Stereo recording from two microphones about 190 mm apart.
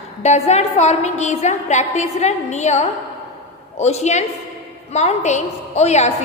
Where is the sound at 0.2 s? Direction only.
35° left (ahead or behind).